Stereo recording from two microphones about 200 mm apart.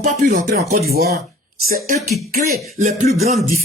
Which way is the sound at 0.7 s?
50° right (ahead or behind).